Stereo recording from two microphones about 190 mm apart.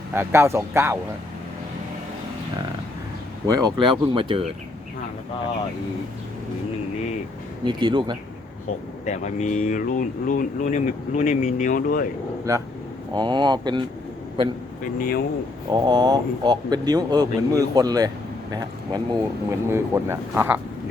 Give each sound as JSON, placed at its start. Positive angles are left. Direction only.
{"t": 0.1, "sound": "speech", "side_deg": -10}
{"t": 3.4, "sound": "speech", "side_deg": -20}
{"t": 7.6, "sound": "speech", "side_deg": -25}
{"t": 9.0, "sound": "speech", "side_deg": 40}
{"t": 12.5, "sound": "speech", "side_deg": -15}
{"t": 14.9, "sound": "speech", "side_deg": 50}
{"t": 15.7, "sound": "speech", "side_deg": -20}